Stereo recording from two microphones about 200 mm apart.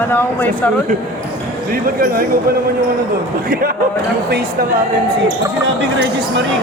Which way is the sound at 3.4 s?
45° right (ahead or behind).